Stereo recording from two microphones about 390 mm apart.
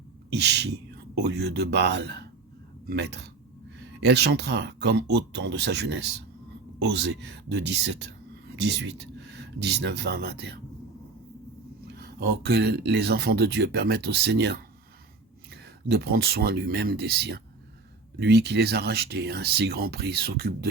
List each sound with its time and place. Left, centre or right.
0.3 s speech: right
9.3 s speech: right
11.9 s speech: right
15.9 s speech: right